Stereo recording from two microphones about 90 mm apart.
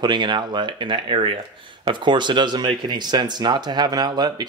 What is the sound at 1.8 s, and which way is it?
Speech, 60° right (ahead or behind).